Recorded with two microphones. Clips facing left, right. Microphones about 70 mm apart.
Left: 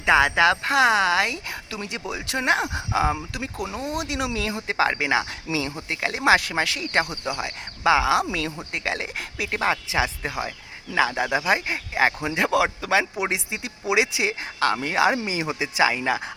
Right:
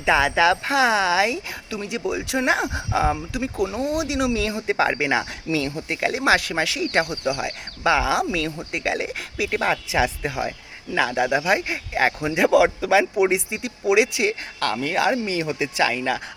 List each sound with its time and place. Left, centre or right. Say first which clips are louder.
0.0 s speech: even; centre